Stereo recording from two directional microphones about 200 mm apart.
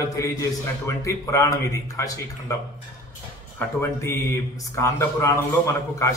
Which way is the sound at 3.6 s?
15° left (ahead or behind).